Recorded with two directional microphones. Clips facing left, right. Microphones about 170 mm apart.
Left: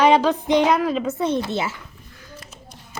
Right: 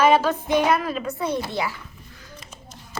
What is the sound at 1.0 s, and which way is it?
Speech, 25° left (ahead or behind).